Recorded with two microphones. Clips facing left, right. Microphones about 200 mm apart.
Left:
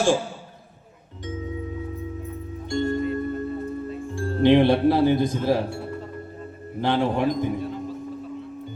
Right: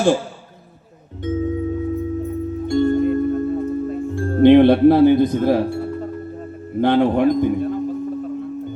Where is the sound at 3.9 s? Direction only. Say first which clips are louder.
Right 6 dB; 55° right (ahead or behind).